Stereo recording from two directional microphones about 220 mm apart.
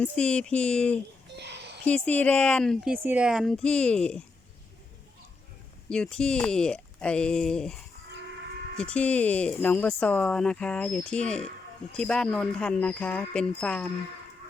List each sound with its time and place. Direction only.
0.0 s speech: 5° left (ahead or behind)
1.4 s a sound: 50° right (ahead or behind)
1.8 s speech: 5° left (ahead or behind)
2.9 s speech: 10° right (ahead or behind)
5.9 s speech: 5° left (ahead or behind)
8.8 s speech: 5° left (ahead or behind)